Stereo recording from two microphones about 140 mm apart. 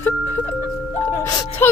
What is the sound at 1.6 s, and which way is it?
Speech, 15° left (ahead or behind).